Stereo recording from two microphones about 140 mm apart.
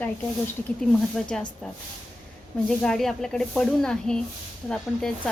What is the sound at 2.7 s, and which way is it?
Speech, 5° left (ahead or behind).